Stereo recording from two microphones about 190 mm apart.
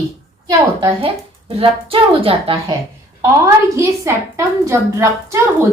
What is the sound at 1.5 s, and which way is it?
A woman's voice, 30° right (ahead or behind).